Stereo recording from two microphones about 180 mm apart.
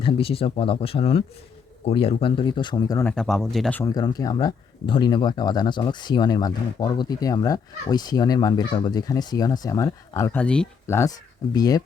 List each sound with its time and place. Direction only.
0.0 s speech: 30° left (ahead or behind)
3.0 s speech: 5° left (ahead or behind)
3.8 s speech: 20° left (ahead or behind)